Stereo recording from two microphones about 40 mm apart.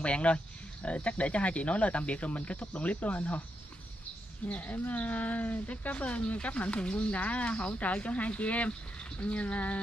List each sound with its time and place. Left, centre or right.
0.0 s speech: left
4.5 s speech: left